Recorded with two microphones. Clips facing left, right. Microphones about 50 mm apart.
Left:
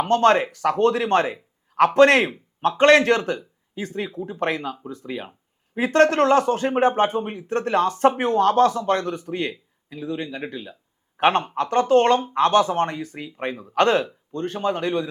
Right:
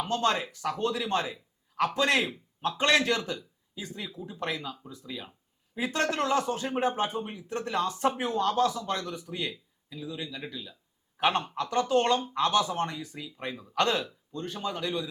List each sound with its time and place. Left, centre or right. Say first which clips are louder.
0.0 s a man's voice: left 10 dB; left